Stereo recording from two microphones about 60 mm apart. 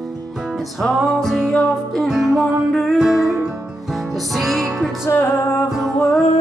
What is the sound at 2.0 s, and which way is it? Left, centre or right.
Music, centre.